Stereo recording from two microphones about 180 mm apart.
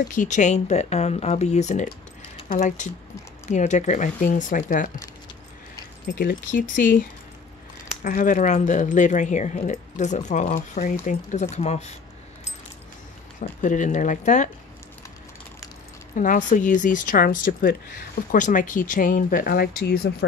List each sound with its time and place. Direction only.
0.1 s speech: 45° left (ahead or behind)
6.1 s speech: 50° left (ahead or behind)
13.4 s speech: 45° left (ahead or behind)
16.2 s speech: 45° left (ahead or behind)